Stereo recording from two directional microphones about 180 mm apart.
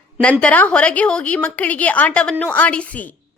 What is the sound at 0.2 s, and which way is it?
A woman's voice, 5° left (ahead or behind).